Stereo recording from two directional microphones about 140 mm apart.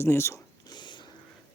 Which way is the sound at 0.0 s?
20° left (ahead or behind).